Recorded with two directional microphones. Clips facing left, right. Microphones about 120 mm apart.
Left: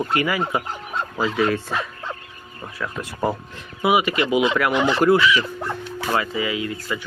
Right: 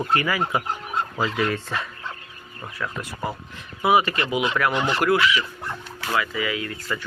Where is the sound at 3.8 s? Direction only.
15° left (ahead or behind).